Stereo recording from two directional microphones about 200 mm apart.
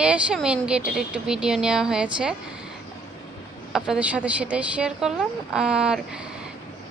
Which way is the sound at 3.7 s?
5° right (ahead or behind).